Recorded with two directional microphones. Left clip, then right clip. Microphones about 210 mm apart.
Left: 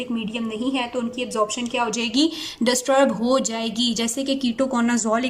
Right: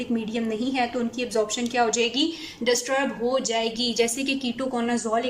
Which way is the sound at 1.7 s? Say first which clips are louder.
Even; 15° left (ahead or behind).